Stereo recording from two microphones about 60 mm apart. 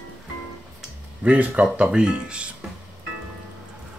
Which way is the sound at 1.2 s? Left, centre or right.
Right.